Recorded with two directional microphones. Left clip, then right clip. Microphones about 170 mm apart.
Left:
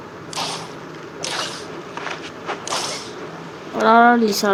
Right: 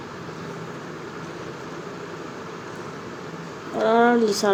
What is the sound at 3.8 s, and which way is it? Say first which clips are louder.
Speech: left 5 dB; 20° left (ahead or behind).